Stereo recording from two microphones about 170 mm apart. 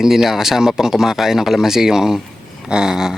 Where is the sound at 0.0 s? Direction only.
Centre (ahead or behind).